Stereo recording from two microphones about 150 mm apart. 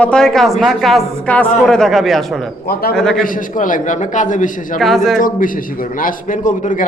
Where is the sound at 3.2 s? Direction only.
60° left (ahead or behind).